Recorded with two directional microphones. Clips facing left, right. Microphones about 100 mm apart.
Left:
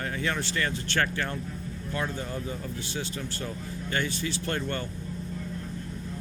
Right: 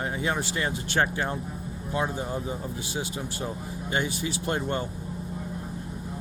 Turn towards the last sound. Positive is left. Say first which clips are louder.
# right 2 dB
turn(degrees=-15)  # may be behind; listen again after turning